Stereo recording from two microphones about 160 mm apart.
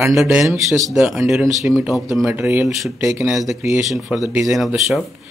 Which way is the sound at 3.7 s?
Centre (ahead or behind).